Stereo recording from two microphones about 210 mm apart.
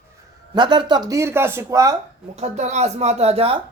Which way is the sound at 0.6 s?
20° right (ahead or behind).